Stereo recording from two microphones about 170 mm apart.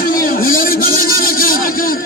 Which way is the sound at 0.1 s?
55° left (ahead or behind).